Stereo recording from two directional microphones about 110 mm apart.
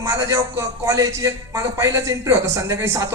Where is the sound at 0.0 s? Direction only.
25° right (ahead or behind).